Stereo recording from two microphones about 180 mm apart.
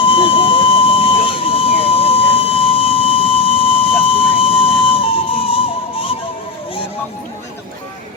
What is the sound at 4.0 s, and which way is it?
Music, 30° left (ahead or behind).